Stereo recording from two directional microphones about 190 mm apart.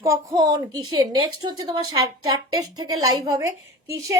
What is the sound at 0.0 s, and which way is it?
A woman's voice, 15° right (ahead or behind).